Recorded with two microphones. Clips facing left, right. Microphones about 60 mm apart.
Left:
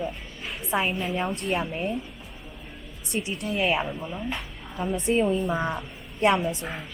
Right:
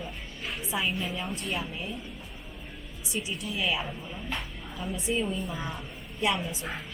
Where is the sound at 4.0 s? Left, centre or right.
Left.